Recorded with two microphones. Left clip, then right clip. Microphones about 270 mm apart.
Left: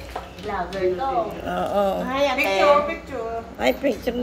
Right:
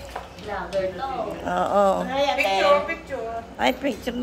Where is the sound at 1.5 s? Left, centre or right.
Centre.